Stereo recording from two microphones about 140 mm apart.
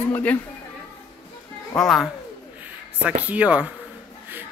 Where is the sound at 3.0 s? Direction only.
10° right (ahead or behind).